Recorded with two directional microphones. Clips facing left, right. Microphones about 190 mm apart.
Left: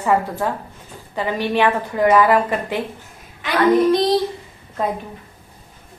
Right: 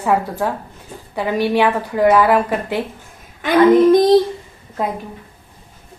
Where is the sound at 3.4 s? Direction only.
50° right (ahead or behind).